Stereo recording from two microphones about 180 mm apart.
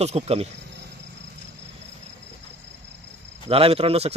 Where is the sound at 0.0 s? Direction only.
35° right (ahead or behind).